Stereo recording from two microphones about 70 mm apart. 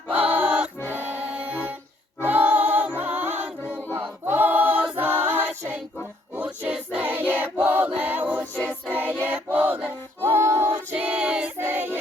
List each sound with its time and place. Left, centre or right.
0.2 s music: right
2.2 s choir: right
4.9 s a capella: right
6.3 s choir: right
8.9 s music: right
10.2 s female singing: right
10.9 s a sound: centre
11.6 s music: right